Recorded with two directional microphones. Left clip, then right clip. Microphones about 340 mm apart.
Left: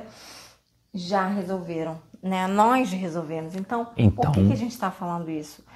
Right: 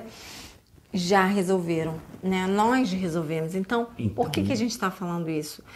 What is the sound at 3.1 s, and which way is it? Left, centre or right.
Speech, right.